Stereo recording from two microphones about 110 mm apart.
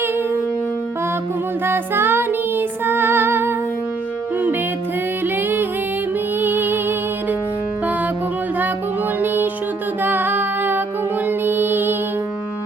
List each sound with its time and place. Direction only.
1.6 s music: 20° right (ahead or behind)
5.2 s music: 20° right (ahead or behind)
9.2 s music: 20° right (ahead or behind)